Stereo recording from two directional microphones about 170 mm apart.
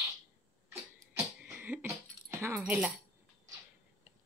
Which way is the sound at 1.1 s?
10° right (ahead or behind).